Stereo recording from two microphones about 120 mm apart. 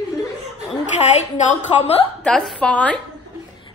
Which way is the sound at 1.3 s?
70° left (ahead or behind).